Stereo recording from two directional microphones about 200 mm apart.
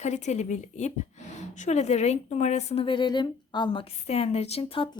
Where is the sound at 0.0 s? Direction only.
35° left (ahead or behind).